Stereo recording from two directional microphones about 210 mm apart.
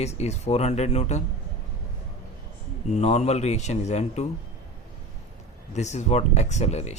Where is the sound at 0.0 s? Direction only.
30° left (ahead or behind).